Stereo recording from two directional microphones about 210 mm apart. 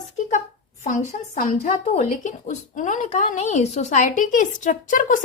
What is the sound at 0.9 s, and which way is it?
Speech, 35° left (ahead or behind).